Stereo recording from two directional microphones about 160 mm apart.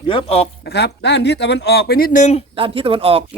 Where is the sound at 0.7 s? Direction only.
90° left; by 2.4 s 50° left (ahead or behind).